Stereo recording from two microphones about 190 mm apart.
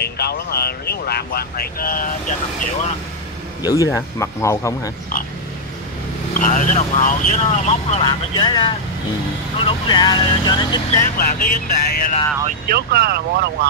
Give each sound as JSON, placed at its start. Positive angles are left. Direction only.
{"t": 0.0, "sound": "speech", "side_deg": 55}
{"t": 3.6, "sound": "speech", "side_deg": 20}
{"t": 6.3, "sound": "speech", "side_deg": 45}
{"t": 8.0, "sound": "speech", "side_deg": 25}
{"t": 11.1, "sound": "music", "side_deg": 50}
{"t": 12.6, "sound": "speech", "side_deg": -55}